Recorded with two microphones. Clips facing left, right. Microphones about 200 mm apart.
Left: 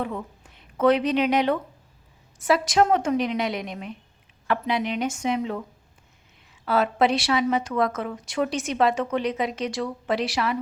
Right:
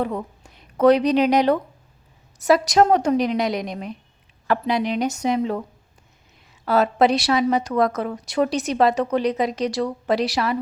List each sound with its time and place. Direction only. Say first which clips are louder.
0.0 s a woman's voice: right 5 dB; 40° right (ahead or behind)
6.7 s a woman's voice: right 4 dB; 40° right (ahead or behind)